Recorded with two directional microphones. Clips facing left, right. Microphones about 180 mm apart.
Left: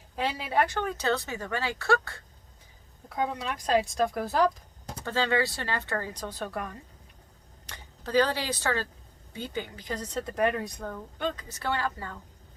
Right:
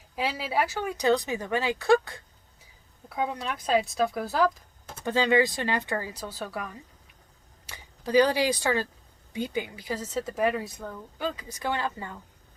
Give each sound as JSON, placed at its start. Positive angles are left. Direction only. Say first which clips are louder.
{"t": 0.2, "sound": "a woman's voice", "louder": "even", "side_deg": -5}
{"t": 3.2, "sound": "speech", "louder": "even", "side_deg": 0}
{"t": 5.0, "sound": "a woman's voice", "louder": "right 4 dB", "side_deg": -15}